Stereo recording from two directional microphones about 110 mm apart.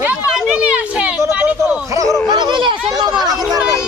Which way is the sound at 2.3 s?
40° right (ahead or behind).